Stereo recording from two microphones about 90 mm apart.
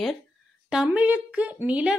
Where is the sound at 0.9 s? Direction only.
15° right (ahead or behind).